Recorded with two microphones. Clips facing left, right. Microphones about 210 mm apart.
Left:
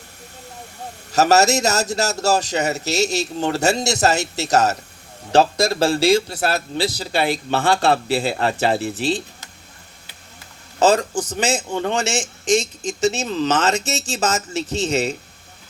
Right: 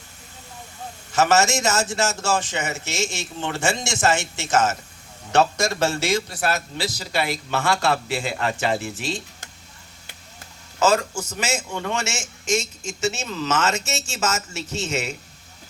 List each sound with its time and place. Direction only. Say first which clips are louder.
1.1 s a man's voice: left 4 dB; 40° left (ahead or behind)
10.8 s a man's voice: left 4 dB; 35° left (ahead or behind)